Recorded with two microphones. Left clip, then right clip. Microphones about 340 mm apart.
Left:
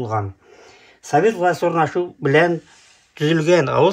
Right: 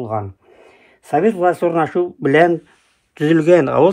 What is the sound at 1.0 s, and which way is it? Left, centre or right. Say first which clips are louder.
A man's voice: right 1 dB; centre.